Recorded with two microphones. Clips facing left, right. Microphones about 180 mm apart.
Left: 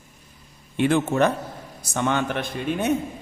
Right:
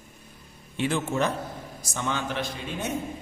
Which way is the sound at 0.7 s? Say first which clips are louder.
Left 6 dB; 60° left (ahead or behind).